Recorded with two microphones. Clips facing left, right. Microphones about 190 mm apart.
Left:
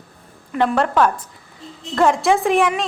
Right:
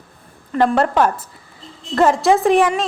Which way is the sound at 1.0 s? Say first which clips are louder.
Even; 5° right (ahead or behind).